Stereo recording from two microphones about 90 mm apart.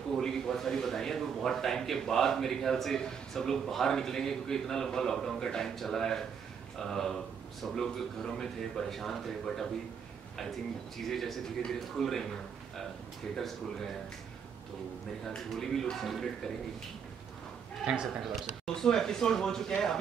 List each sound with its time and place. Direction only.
0.1 s a man's voice: 5° left (ahead or behind)
11.1 s a man's voice: 5° left (ahead or behind)
15.2 s a man's voice: 5° left (ahead or behind)
18.3 s a man's voice: 5° left (ahead or behind)